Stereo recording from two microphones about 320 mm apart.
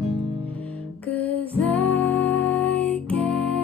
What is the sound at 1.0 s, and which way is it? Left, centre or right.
Music, centre.